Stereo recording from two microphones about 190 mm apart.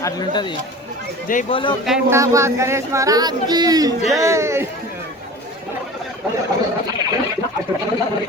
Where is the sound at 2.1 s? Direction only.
15° right (ahead or behind).